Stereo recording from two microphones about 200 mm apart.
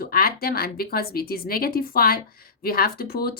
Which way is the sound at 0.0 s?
45° left (ahead or behind).